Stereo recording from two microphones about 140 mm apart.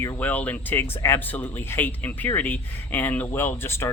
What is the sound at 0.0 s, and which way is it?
Speech, 15° left (ahead or behind).